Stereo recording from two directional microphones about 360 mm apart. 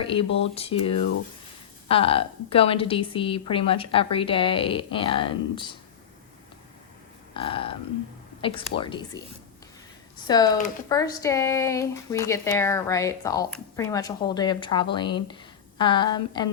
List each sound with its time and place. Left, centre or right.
0.0 s speech: centre
1.9 s speech: centre
7.3 s speech: centre